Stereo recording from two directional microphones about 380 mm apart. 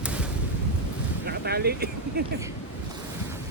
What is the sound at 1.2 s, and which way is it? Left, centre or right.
Speech, right.